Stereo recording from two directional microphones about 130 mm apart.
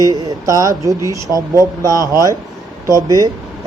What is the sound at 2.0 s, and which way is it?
Speech, 30° left (ahead or behind).